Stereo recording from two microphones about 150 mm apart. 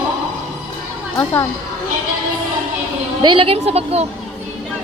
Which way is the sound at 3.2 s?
35° right (ahead or behind).